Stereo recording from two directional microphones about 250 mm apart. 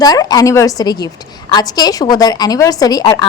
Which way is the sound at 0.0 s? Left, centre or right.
Centre.